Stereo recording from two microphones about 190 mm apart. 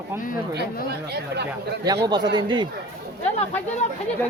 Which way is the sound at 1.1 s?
60° right (ahead or behind).